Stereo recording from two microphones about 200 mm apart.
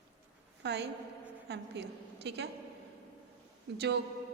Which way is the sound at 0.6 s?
55° right (ahead or behind).